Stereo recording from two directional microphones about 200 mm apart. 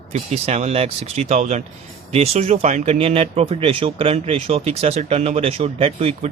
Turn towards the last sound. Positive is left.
turn(degrees=-30)  # may be behind; listen again after turning